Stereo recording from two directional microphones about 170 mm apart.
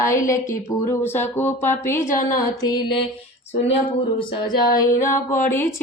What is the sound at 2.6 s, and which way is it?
Mantra, 20° left (ahead or behind).